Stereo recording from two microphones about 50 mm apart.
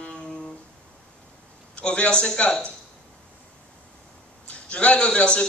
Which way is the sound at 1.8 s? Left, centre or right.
Left.